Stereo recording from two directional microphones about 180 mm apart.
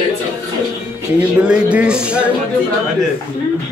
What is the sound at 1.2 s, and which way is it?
Speech, 5° right (ahead or behind).